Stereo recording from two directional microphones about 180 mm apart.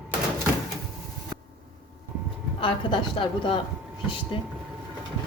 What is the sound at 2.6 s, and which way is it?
A woman's voice, 25° left (ahead or behind).